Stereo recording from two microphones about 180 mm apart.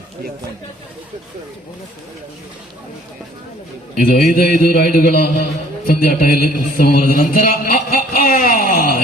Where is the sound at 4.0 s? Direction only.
50° left (ahead or behind).